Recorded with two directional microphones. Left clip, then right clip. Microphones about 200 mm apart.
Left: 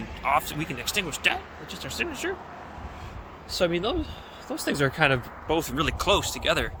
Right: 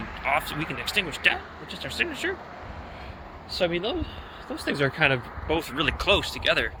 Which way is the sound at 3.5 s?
30° left (ahead or behind).